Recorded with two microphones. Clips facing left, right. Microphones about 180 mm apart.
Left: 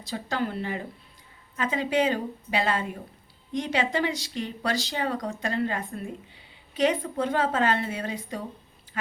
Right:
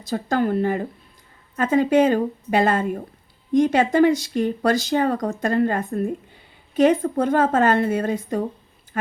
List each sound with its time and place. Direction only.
0.0 s speech: 45° right (ahead or behind)